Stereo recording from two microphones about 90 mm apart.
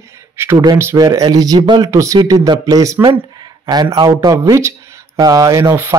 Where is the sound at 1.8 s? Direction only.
40° right (ahead or behind).